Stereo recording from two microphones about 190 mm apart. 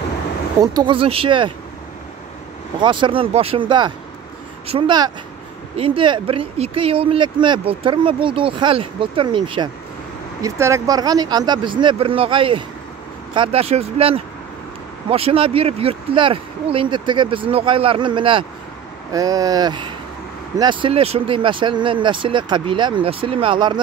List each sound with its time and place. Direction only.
0.6 s speech: 25° right (ahead or behind)
2.8 s speech: 25° right (ahead or behind)